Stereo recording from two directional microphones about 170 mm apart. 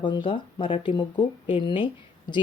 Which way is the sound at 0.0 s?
30° left (ahead or behind).